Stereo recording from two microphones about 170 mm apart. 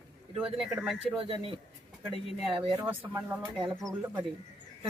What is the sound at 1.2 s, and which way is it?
Speech, 30° right (ahead or behind).